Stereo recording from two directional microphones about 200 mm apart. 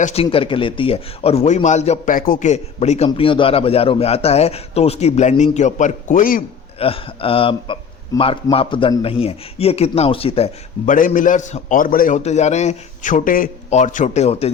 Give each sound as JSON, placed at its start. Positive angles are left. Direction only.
{"t": 0.0, "sound": "a man's voice", "side_deg": 30}
{"t": 6.7, "sound": "a man's voice", "side_deg": 30}